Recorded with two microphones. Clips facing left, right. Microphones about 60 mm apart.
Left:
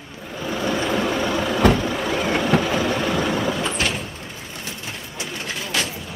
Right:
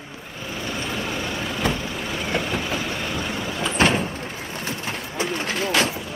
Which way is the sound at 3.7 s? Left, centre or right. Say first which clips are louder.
Right 5 dB; right.